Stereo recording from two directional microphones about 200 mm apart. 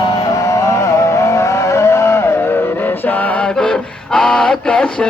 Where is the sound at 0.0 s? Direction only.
20° left (ahead or behind).